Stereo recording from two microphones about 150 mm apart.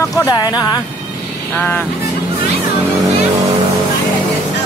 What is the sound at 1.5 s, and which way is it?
Speech, 10° left (ahead or behind).